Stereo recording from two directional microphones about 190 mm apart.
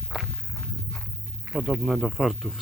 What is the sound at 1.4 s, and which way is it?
Speech, 5° right (ahead or behind).